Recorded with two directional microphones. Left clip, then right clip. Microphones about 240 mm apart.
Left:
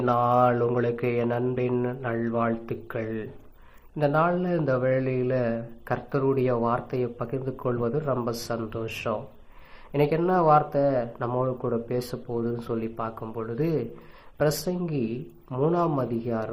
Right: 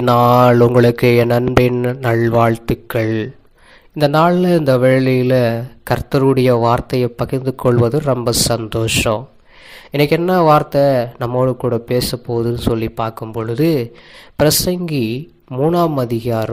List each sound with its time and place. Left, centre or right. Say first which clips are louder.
0.1 s mantra: right 11 dB; right
4.0 s speech: right 11 dB; right